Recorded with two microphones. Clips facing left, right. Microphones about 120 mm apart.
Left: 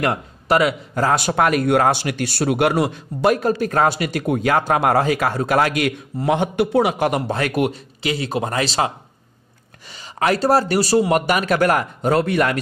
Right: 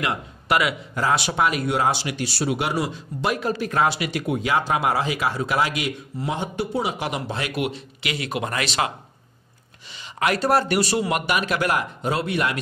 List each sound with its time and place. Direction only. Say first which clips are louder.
0.0 s a man's voice: left 5 dB; 40° left (ahead or behind)
9.9 s speech: left 4 dB; 40° left (ahead or behind)